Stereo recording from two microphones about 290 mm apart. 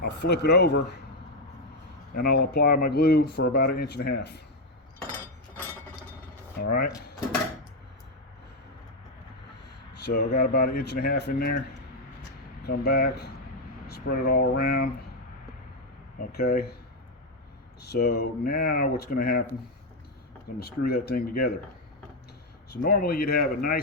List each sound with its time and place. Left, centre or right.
0.0 s speech: left
2.5 s speech: left
5.0 s a sound: centre
6.6 s speech: left
10.1 s speech: left
12.6 s speech: left
16.1 s speech: left
17.8 s speech: left
20.6 s speech: left
22.7 s speech: left